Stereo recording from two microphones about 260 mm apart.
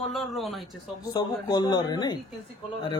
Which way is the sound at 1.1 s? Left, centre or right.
Centre.